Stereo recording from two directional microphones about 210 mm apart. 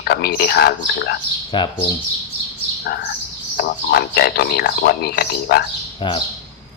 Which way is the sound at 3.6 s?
50° left (ahead or behind).